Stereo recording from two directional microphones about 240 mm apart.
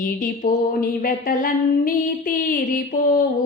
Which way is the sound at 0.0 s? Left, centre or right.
Left.